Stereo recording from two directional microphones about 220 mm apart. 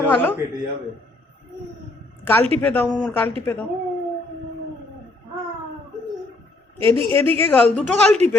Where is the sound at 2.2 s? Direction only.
10° left (ahead or behind).